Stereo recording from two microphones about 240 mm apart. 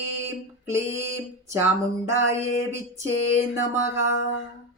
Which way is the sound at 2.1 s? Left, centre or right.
Right.